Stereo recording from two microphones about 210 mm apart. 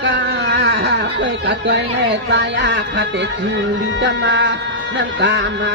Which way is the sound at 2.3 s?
60° right (ahead or behind).